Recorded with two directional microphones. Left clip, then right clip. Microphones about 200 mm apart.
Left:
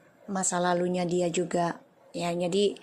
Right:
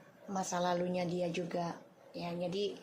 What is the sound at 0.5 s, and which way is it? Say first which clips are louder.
A woman's voice: left 7 dB; 25° left (ahead or behind).